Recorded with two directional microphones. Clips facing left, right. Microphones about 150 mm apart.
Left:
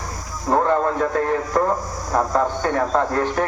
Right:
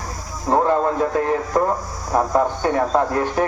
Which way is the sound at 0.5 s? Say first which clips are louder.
Right 1 dB; 30° right (ahead or behind).